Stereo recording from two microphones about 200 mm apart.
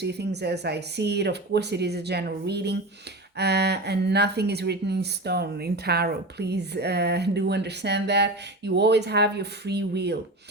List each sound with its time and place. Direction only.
0.0 s speech: 55° right (ahead or behind)